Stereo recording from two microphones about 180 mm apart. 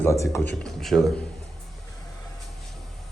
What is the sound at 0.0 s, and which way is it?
Speech, 15° left (ahead or behind).